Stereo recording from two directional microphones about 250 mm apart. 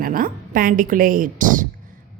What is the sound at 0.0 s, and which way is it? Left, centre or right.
A woman's voice, right.